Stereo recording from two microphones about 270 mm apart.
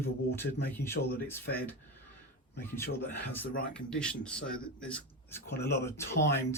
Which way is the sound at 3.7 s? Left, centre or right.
Centre.